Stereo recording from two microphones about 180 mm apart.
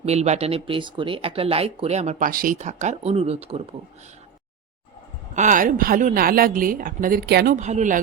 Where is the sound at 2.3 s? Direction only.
50° right (ahead or behind); by 3.7 s 35° right (ahead or behind).